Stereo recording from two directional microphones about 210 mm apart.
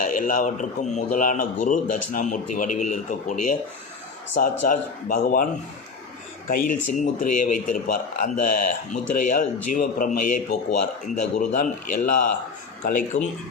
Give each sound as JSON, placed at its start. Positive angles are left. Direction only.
{"t": 0.0, "sound": "speech", "side_deg": 40}
{"t": 6.5, "sound": "speech", "side_deg": 40}